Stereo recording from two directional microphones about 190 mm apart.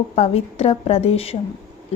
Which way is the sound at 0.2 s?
30° left (ahead or behind).